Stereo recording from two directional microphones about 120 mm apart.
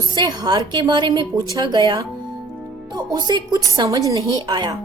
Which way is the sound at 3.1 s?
35° right (ahead or behind).